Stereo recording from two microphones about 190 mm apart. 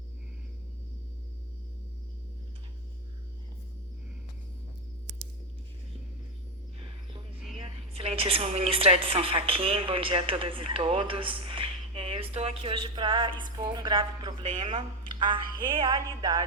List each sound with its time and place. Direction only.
7.6 s a woman's voice: 30° right (ahead or behind)